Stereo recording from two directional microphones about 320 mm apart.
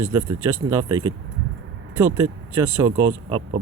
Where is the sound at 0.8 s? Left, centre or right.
Centre.